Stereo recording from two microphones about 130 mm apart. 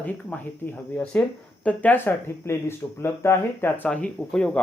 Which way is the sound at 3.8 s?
10° left (ahead or behind).